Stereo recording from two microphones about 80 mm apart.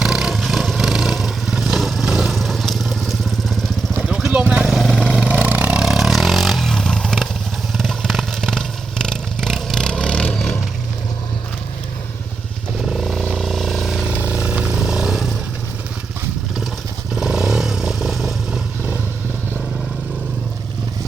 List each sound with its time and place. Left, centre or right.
0.0 s vehicle: centre
4.3 s vehicle: centre
12.8 s vehicle: centre
14.1 s vehicle: right
17.2 s vehicle: centre